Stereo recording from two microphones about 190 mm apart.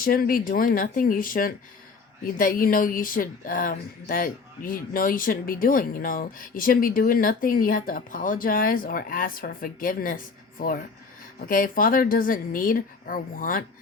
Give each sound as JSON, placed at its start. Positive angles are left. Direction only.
{"t": 0.0, "sound": "speech", "side_deg": 50}